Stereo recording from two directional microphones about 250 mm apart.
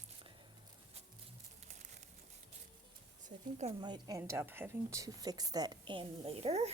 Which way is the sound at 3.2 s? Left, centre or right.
Right.